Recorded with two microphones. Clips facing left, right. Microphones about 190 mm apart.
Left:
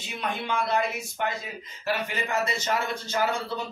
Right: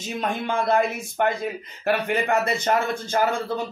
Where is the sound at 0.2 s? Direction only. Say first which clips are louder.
Right 3 dB; 45° right (ahead or behind).